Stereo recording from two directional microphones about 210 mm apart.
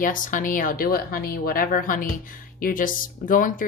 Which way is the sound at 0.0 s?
40° left (ahead or behind).